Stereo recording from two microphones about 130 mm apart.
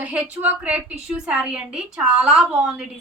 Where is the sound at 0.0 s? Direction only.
10° right (ahead or behind).